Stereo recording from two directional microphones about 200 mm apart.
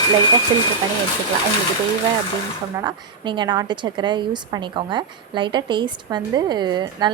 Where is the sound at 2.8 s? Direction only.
20° right (ahead or behind).